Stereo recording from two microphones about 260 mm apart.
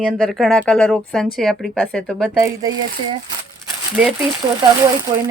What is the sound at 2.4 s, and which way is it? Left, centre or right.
Speech, centre.